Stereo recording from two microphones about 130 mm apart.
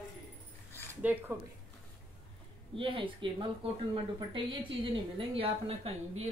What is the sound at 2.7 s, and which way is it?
Speech, 40° right (ahead or behind).